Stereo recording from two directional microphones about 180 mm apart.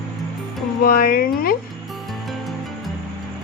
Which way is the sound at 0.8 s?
50° left (ahead or behind).